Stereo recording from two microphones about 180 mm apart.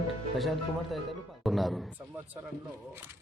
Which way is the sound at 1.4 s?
Centre (ahead or behind).